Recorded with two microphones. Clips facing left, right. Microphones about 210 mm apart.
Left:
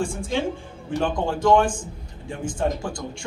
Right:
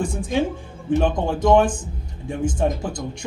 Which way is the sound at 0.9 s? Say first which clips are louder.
Right 3 dB; 20° right (ahead or behind).